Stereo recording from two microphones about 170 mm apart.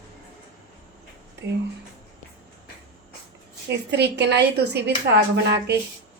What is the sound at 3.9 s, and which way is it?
A woman's voice, 80° right.